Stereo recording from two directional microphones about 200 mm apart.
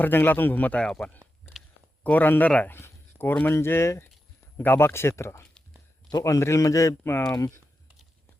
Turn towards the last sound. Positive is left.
turn(degrees=15)  # may be behind; listen again after turning